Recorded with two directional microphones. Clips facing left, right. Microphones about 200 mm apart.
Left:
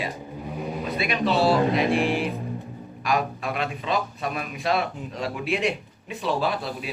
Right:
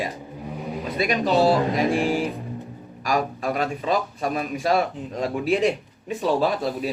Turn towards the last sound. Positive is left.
turn(degrees=-40)  # may be behind; listen again after turning